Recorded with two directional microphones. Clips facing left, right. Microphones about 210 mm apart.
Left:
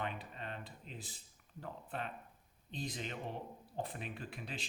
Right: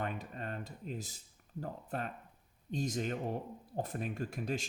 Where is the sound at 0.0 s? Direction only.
45° right (ahead or behind).